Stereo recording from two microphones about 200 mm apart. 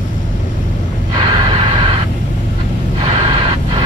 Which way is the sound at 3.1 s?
25° right (ahead or behind).